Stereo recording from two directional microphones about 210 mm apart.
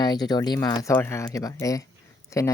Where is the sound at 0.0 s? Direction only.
20° left (ahead or behind).